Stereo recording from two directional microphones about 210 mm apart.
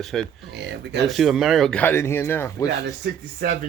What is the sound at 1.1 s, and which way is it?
Speech, centre (ahead or behind).